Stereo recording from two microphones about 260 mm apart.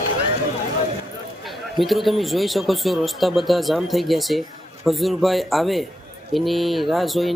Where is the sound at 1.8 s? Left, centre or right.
Centre.